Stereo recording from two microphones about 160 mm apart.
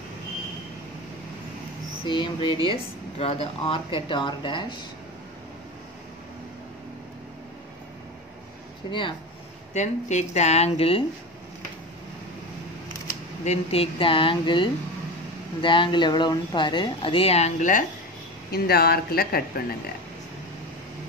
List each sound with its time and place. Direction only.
2.0 s speech: 30° left (ahead or behind)
9.8 s speech: 45° left (ahead or behind)
13.4 s speech: 40° left (ahead or behind)
18.5 s speech: 75° left (ahead or behind)